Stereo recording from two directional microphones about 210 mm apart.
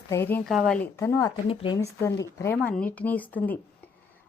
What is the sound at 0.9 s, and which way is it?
Speech, 15° left (ahead or behind).